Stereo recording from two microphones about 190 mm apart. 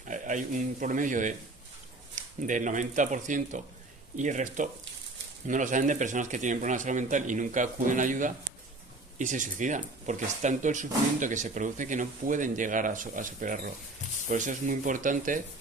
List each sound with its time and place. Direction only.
0.0 s a man's voice: 40° right (ahead or behind)